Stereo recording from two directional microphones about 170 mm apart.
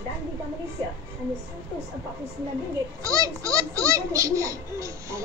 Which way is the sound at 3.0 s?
20° right (ahead or behind).